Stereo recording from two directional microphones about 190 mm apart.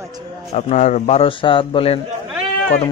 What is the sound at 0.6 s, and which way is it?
A man's voice, 35° left (ahead or behind).